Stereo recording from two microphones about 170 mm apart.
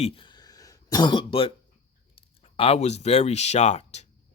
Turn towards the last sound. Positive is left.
turn(degrees=40)  # may be behind; listen again after turning